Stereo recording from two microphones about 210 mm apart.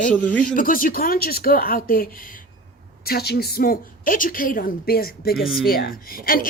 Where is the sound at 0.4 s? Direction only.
40° left (ahead or behind).